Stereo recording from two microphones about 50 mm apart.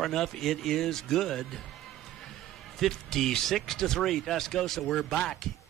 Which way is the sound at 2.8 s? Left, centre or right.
Centre.